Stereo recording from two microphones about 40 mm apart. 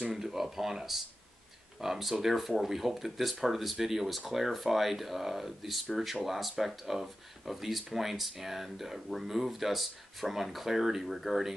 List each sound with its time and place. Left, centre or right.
0.1 s speech: centre